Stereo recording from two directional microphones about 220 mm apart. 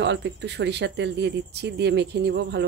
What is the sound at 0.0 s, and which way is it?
Speech, 55° right (ahead or behind).